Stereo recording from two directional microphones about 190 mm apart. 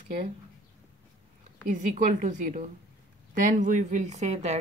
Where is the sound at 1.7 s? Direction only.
40° right (ahead or behind).